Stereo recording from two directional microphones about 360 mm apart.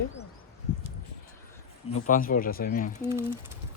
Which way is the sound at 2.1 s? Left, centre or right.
Left.